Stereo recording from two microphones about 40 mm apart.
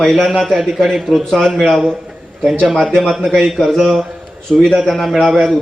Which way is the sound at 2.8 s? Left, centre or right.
Centre.